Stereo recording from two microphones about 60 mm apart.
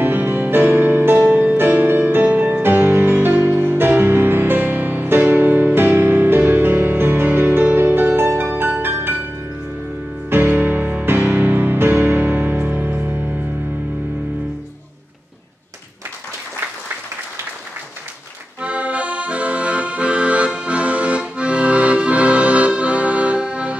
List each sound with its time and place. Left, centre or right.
0.0 s music: right
10.3 s music: right
18.6 s accordion: right